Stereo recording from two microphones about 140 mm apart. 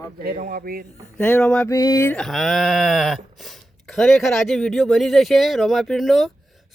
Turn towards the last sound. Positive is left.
turn(degrees=0)  # may be behind; listen again after turning